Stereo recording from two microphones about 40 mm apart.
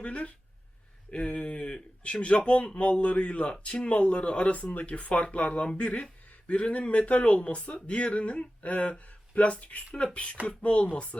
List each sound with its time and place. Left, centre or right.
0.0 s speech: left
4.5 s speech: left